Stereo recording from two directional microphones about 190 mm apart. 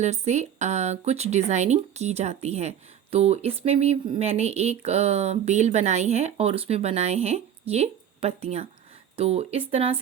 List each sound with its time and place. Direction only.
0.0 s speech: 35° right (ahead or behind)